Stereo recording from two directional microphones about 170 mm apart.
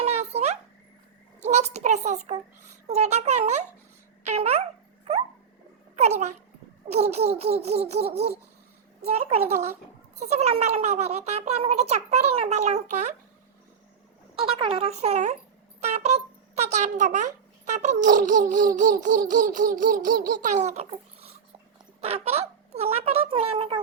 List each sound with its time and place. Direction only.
0.0 s a sound: 40° right (ahead or behind)
1.4 s a child's voice: 45° right (ahead or behind)
6.0 s a child's voice: 40° right (ahead or behind)
14.3 s a child's voice: 30° right (ahead or behind)
18.0 s a sound: 50° right (ahead or behind)
22.0 s a child's voice: 35° right (ahead or behind)